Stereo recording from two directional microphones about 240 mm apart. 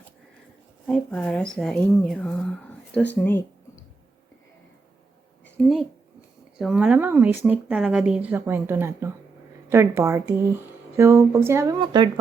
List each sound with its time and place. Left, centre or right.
0.9 s speech: centre
5.5 s a woman's voice: centre